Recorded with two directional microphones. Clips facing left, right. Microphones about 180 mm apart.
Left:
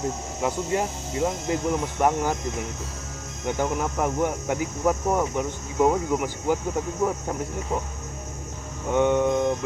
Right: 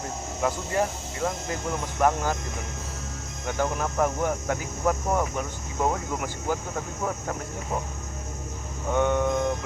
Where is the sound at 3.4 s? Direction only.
15° left (ahead or behind).